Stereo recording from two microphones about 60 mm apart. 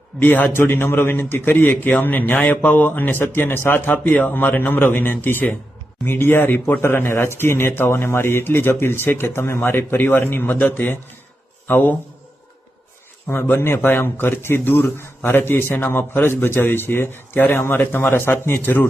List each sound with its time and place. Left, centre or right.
0.2 s a man's voice: left
0.6 s speech: left
3.8 s speech: left
13.2 s speech: left